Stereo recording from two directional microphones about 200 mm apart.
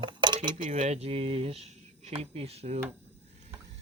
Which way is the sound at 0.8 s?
35° right (ahead or behind).